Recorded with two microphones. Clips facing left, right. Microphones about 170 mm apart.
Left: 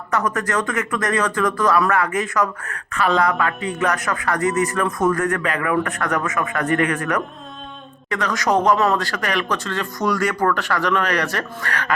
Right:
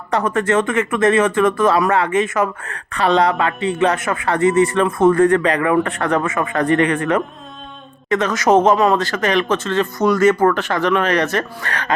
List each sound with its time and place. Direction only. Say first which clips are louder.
0.1 s speech: right 5 dB; 30° right (ahead or behind)